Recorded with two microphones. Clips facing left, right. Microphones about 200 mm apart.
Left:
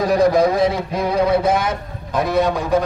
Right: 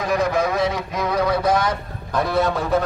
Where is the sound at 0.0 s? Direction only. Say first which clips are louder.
Left 6 dB; 35° left (ahead or behind).